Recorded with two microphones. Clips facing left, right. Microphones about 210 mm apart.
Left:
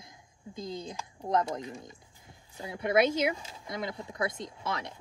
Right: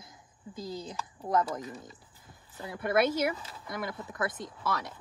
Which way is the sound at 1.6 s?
10° left (ahead or behind).